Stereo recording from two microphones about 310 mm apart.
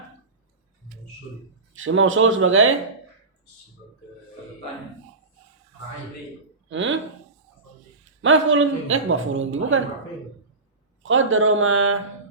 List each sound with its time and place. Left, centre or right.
1.7 s a woman's voice: right
6.7 s a woman's voice: right
8.2 s a woman's voice: right
11.0 s a woman's voice: right